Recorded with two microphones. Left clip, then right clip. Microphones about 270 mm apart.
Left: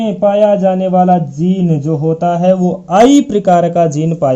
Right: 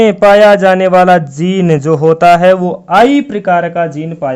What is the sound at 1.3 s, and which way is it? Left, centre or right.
Speech, right.